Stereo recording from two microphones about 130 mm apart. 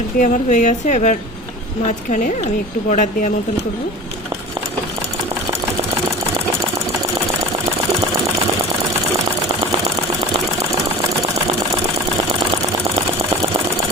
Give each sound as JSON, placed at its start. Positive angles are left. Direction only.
{"t": 0.2, "sound": "speech", "side_deg": 75}